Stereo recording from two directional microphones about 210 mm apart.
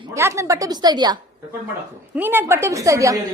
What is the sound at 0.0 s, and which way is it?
A woman's voice, 15° right (ahead or behind).